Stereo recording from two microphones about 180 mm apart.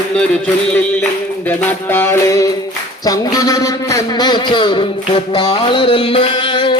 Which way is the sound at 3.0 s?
20° left (ahead or behind).